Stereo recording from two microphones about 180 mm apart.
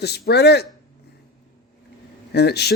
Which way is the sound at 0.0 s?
65° left (ahead or behind).